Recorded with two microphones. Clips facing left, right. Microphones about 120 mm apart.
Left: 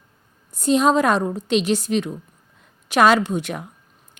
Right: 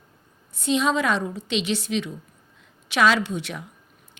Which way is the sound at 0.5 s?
45° left (ahead or behind).